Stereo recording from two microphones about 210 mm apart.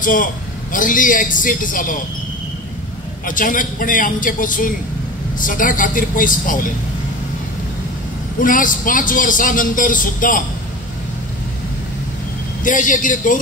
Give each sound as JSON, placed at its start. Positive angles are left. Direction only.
{"t": 0.0, "sound": "a man's voice", "side_deg": 40}
{"t": 3.3, "sound": "a man's voice", "side_deg": 40}
{"t": 8.4, "sound": "a man's voice", "side_deg": 40}
{"t": 12.6, "sound": "a man's voice", "side_deg": 40}